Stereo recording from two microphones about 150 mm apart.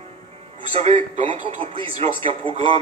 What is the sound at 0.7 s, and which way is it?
A man's voice, 45° right (ahead or behind).